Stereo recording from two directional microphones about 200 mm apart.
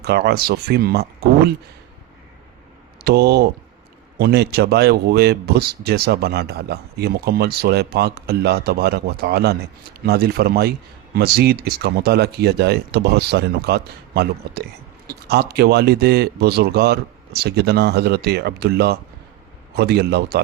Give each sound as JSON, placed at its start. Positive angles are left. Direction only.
{"t": 0.0, "sound": "a man's voice", "side_deg": -55}
{"t": 3.0, "sound": "a man's voice", "side_deg": -50}